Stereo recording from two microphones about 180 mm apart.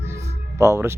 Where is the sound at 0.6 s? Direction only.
15° right (ahead or behind).